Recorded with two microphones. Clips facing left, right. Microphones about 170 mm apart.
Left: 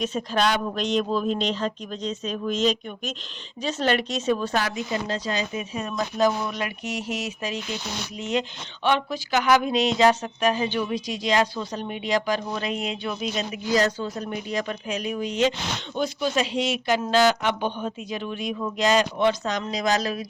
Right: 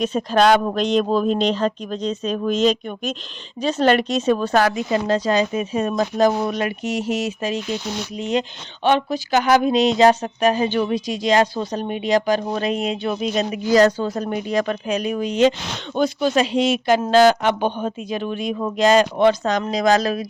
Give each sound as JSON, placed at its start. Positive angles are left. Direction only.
{"t": 0.0, "sound": "speech", "side_deg": -55}
{"t": 5.5, "sound": "speech", "side_deg": -40}
{"t": 6.8, "sound": "speech", "side_deg": -30}
{"t": 10.8, "sound": "speech", "side_deg": -55}
{"t": 13.7, "sound": "speech", "side_deg": -65}